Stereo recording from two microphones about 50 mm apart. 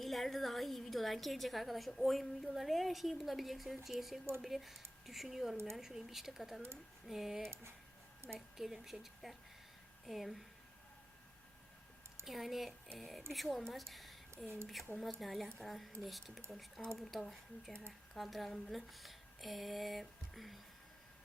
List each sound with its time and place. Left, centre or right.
0.0 s a woman's voice: centre
8.5 s a woman's voice: centre
12.2 s a woman's voice: centre
17.7 s speech: centre
18.2 s a woman's voice: centre